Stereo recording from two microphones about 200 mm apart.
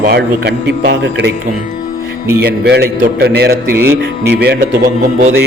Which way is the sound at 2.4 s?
55° right (ahead or behind).